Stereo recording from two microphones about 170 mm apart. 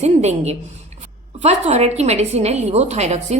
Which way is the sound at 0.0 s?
40° right (ahead or behind).